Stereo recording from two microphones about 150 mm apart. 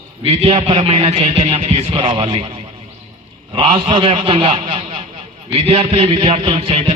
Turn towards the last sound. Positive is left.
turn(degrees=-40)  # may be behind; listen again after turning